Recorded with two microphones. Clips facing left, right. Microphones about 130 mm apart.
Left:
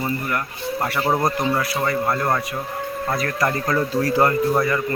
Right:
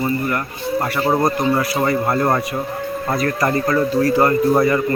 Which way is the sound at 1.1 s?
5° right (ahead or behind).